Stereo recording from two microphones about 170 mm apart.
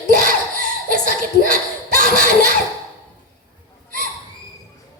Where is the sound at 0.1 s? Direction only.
55° right (ahead or behind).